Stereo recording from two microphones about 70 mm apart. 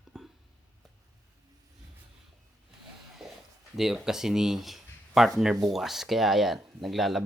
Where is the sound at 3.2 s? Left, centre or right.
Centre.